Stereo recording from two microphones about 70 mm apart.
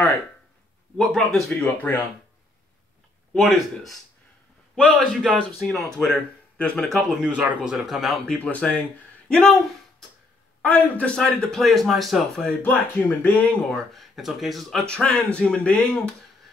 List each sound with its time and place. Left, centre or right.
0.9 s speech: centre
1.6 s speech: left
3.7 s a man's voice: centre
6.9 s a man's voice: centre
8.5 s speech: left
9.3 s speech: centre
10.6 s speech: centre
11.1 s speech: centre
12.4 s speech: left
13.7 s speech: centre
14.9 s speech: centre